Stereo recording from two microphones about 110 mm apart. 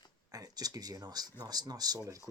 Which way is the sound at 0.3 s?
35° right (ahead or behind).